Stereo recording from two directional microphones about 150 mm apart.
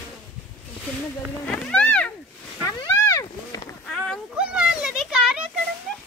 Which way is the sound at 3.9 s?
Centre (ahead or behind).